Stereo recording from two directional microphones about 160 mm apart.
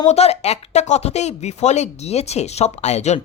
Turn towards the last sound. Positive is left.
turn(degrees=45)  # may be behind; listen again after turning